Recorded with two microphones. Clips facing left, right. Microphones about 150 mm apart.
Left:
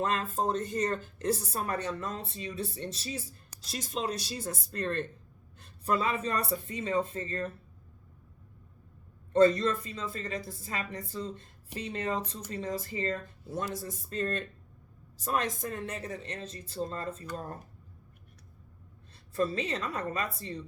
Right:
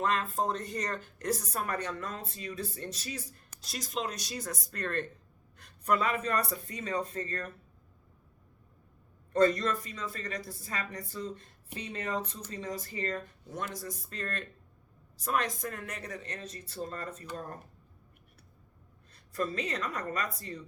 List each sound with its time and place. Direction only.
0.0 s a woman's voice: 35° left (ahead or behind)
9.3 s a woman's voice: 30° left (ahead or behind)
19.3 s a woman's voice: 30° left (ahead or behind)